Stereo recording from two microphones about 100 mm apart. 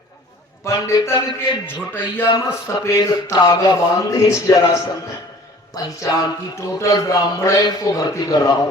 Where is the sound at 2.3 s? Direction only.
45° left (ahead or behind).